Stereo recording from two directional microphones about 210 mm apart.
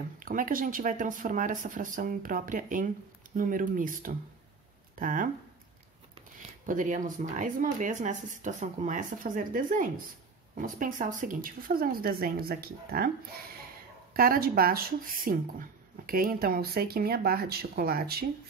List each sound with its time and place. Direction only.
0.2 s speech: 40° right (ahead or behind)
6.6 s speech: 40° right (ahead or behind)
14.1 s speech: 45° right (ahead or behind)